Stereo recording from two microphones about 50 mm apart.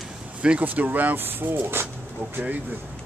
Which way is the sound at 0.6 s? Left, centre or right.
Right.